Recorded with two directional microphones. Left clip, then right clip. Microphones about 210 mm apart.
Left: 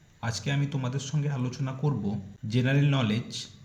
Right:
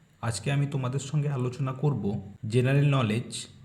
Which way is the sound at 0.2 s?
15° right (ahead or behind).